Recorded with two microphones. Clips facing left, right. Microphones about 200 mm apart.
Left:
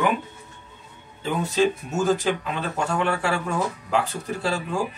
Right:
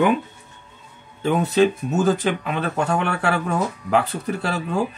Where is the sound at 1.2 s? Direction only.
55° right (ahead or behind).